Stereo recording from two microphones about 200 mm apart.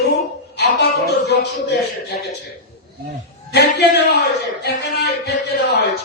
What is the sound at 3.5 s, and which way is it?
A man's voice, 55° left (ahead or behind).